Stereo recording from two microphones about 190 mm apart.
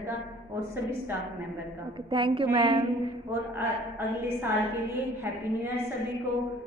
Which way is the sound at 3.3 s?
10° right (ahead or behind).